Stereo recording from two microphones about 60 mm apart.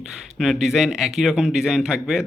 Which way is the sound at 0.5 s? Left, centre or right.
Centre.